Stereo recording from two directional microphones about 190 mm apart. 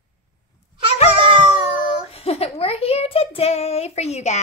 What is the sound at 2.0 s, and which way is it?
A child's voice, 30° left (ahead or behind).